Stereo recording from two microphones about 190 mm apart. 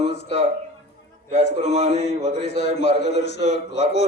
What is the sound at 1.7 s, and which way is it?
Speech, 30° right (ahead or behind).